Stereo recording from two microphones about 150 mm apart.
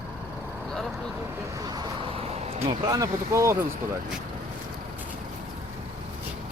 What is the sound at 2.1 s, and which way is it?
Vehicle, 40° right (ahead or behind).